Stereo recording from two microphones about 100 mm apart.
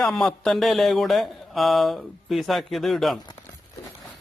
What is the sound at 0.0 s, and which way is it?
Speech, 5° left (ahead or behind).